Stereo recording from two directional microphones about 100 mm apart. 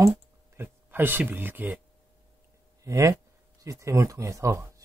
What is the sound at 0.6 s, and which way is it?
Speech, 20° right (ahead or behind).